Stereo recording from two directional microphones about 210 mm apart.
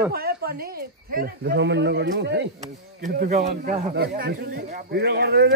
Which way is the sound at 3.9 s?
50° right (ahead or behind).